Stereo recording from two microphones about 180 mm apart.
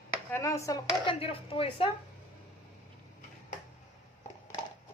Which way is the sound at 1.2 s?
30° left (ahead or behind).